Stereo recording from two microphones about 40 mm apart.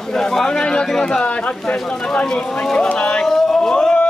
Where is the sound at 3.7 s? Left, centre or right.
Centre.